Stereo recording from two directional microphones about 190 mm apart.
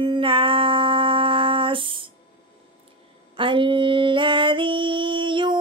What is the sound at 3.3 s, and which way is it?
Female singing, 25° right (ahead or behind).